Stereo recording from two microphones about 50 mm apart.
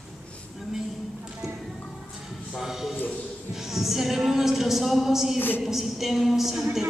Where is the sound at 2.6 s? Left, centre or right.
Centre.